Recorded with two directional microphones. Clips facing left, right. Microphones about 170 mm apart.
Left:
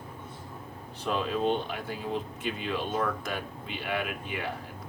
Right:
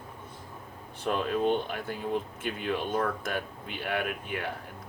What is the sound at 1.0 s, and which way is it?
Speech, 50° right (ahead or behind).